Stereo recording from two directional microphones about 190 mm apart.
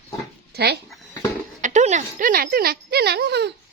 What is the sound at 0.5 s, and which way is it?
Speech, 60° right (ahead or behind).